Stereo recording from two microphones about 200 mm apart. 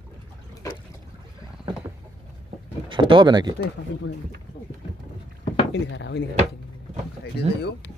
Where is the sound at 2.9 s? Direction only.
25° right (ahead or behind).